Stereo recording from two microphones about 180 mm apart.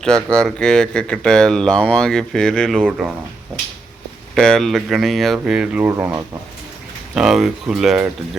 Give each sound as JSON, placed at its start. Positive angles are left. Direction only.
{"t": 0.0, "sound": "speech", "side_deg": 5}
{"t": 4.4, "sound": "speech", "side_deg": 5}